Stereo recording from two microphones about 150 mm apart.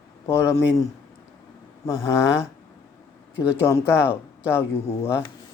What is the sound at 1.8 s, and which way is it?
Speech, 15° left (ahead or behind).